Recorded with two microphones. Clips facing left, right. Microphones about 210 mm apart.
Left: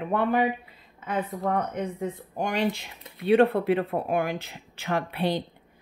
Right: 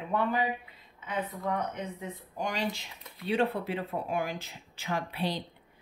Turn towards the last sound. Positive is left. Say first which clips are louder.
# left 6 dB
turn(degrees=55)  # may be behind; listen again after turning